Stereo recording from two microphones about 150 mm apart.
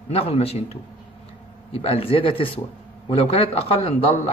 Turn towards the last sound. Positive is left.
turn(degrees=40)  # may be behind; listen again after turning